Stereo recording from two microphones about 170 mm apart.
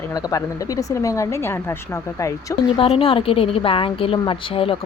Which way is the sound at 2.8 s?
30° left (ahead or behind).